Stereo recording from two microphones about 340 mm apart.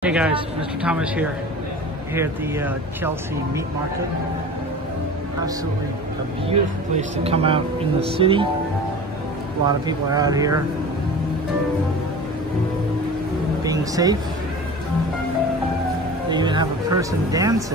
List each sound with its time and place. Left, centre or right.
0.0 s speech: centre
6.5 s speech: centre
9.8 s speech: centre
13.7 s speech: centre
16.3 s speech: centre